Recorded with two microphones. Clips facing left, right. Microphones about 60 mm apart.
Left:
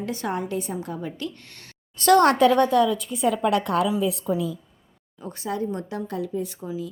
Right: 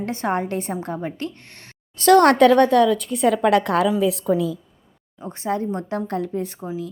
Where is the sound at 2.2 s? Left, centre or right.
Right.